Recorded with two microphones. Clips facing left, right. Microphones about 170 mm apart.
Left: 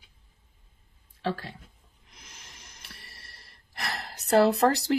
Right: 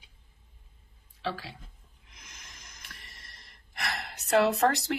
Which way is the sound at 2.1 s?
30° left (ahead or behind).